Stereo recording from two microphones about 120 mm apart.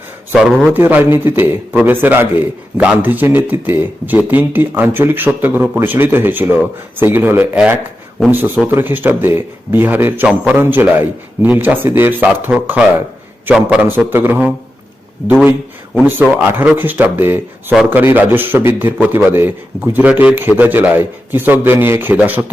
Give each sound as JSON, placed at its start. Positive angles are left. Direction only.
{"t": 0.3, "sound": "a man's voice", "side_deg": -5}
{"t": 0.7, "sound": "a man's voice", "side_deg": -15}
{"t": 16.3, "sound": "a man's voice", "side_deg": -15}